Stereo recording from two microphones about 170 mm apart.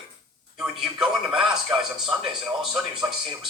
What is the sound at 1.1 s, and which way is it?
Speech, 5° right (ahead or behind).